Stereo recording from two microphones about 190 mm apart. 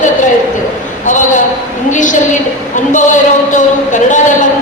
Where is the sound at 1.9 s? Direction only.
40° left (ahead or behind).